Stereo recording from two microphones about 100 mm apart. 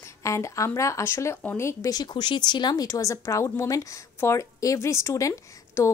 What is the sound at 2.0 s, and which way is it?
Speech, 50° left (ahead or behind).